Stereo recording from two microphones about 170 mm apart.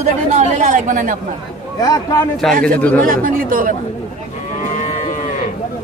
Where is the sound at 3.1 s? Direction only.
55° right (ahead or behind).